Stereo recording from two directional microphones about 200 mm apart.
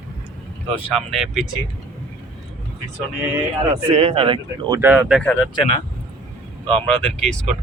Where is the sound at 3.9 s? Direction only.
30° right (ahead or behind).